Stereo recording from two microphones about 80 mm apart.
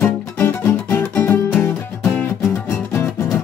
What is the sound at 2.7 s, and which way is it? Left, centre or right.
Music, left.